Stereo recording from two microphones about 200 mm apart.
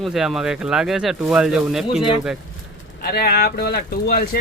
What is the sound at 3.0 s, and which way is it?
Speech, 50° left (ahead or behind).